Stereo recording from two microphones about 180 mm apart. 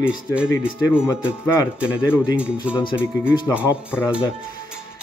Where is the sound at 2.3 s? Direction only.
5° right (ahead or behind).